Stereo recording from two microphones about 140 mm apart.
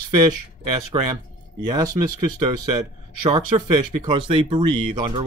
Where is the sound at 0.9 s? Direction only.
30° right (ahead or behind).